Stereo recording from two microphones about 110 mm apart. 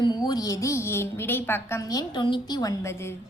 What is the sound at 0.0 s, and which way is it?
A woman's voice, 40° left (ahead or behind).